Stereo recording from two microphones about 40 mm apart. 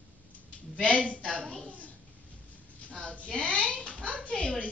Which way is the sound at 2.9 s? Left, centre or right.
Left.